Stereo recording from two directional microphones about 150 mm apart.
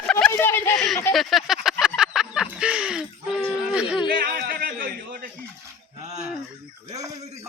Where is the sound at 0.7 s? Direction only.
Centre (ahead or behind).